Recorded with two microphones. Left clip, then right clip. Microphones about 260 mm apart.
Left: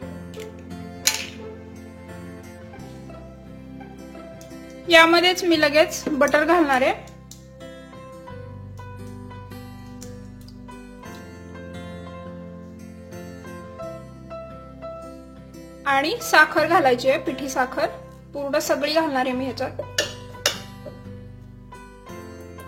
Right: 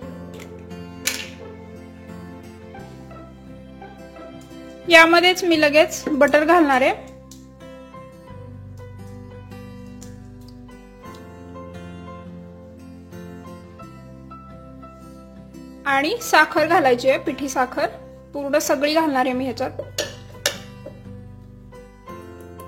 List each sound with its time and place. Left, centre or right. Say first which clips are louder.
0.7 s music: left 3 dB; centre
4.8 s a woman's voice: right 2 dB; centre
5.9 s a woman's voice: right 1 dB; centre
6.1 s a woman's voice: right 3 dB; centre
11.7 s music: left 1 dB; centre
15.8 s a woman's voice: right 1 dB; right
20.0 s music: left 2 dB; centre